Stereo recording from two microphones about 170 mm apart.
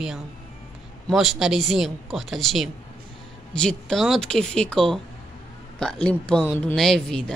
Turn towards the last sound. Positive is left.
turn(degrees=5)  # may be behind; listen again after turning